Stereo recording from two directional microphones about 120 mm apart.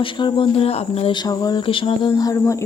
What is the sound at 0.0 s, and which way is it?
Speech, 45° left (ahead or behind).